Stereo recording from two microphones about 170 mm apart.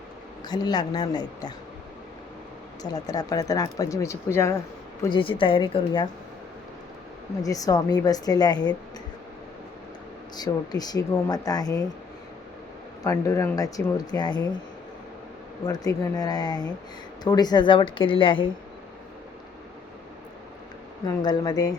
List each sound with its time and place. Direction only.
0.4 s speech: 25° left (ahead or behind)
2.9 s speech: 20° left (ahead or behind)
5.0 s a woman's voice: 30° left (ahead or behind)
7.4 s speech: 20° left (ahead or behind)
10.3 s speech: 25° left (ahead or behind)
13.0 s speech: 15° left (ahead or behind)
15.6 s speech: 20° left (ahead or behind)
21.2 s speech: 25° left (ahead or behind)